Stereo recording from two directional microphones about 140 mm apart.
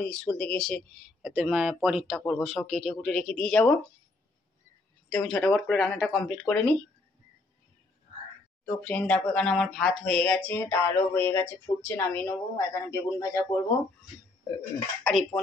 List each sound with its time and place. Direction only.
0.0 s speech: 10° left (ahead or behind)
1.2 s speech: 10° right (ahead or behind)
5.1 s speech: 5° left (ahead or behind)
8.8 s speech: 10° left (ahead or behind)
15.0 s speech: 5° left (ahead or behind)